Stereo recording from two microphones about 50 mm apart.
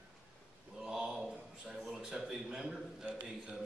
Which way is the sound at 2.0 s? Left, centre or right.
Centre.